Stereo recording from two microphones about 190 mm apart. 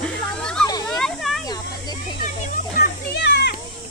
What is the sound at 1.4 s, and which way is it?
Children playing, 20° left (ahead or behind).